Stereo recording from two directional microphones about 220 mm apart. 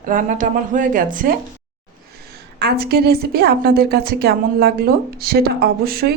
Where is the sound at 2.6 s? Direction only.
45° right (ahead or behind).